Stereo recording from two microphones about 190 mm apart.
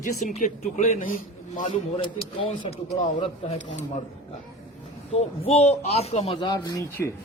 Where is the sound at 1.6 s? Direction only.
25° left (ahead or behind).